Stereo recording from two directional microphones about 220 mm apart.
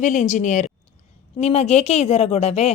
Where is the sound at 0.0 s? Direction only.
35° left (ahead or behind).